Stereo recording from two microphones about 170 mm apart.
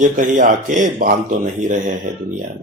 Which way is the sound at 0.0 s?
50° right (ahead or behind).